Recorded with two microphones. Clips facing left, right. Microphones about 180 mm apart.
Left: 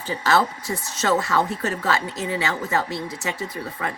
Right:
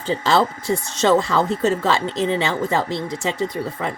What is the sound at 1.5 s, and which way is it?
Speech, 25° right (ahead or behind).